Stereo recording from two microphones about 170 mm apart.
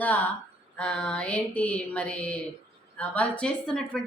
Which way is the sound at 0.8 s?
5° left (ahead or behind).